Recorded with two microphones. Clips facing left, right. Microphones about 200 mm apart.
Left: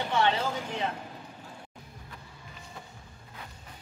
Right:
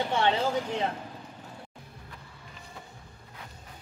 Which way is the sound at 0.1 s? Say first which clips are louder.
Even; 30° right (ahead or behind).